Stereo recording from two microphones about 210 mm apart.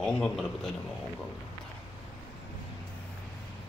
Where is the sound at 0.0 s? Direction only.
5° left (ahead or behind).